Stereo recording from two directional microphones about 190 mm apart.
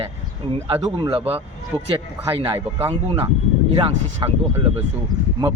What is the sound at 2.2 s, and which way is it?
Speech, 15° right (ahead or behind).